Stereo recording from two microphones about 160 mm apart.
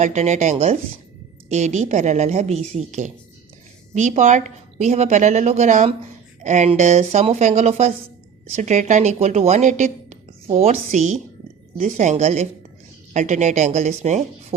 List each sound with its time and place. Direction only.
0.0 s a woman's voice: 45° right (ahead or behind)